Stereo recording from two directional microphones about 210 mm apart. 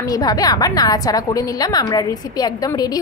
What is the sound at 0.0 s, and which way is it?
A woman's voice, 15° left (ahead or behind).